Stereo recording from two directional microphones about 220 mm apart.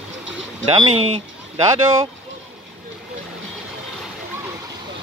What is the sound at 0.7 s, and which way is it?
Speech, 20° right (ahead or behind).